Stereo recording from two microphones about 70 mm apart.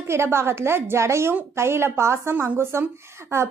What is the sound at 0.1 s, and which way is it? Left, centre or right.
A woman's voice, right.